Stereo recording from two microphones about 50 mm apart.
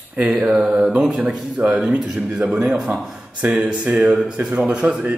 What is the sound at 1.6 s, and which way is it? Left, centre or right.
Speech, right.